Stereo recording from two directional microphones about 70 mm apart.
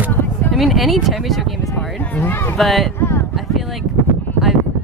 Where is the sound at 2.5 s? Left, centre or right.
Centre.